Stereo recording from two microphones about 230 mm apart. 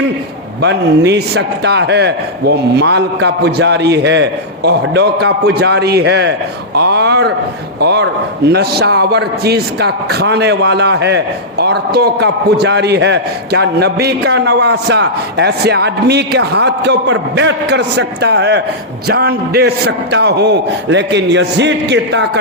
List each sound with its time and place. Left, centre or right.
0.6 s a man's voice: right